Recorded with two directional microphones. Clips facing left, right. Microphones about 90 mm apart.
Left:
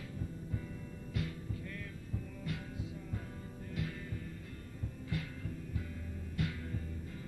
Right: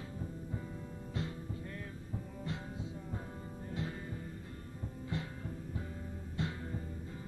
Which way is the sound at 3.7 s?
30° right (ahead or behind).